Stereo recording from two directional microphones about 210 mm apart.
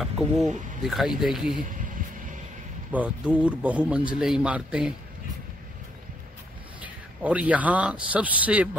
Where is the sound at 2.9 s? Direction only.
5° right (ahead or behind).